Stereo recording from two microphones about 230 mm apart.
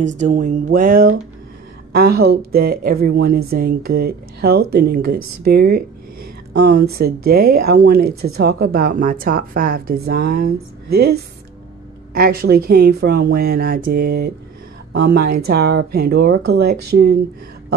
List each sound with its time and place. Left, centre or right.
0.0 s speech: right